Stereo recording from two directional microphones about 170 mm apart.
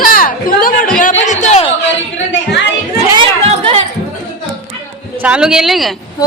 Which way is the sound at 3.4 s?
35° right (ahead or behind).